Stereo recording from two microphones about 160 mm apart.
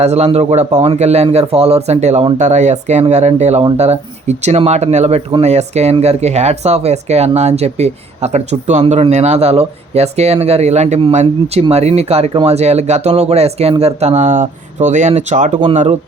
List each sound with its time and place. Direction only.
0.0 s speech: 40° right (ahead or behind)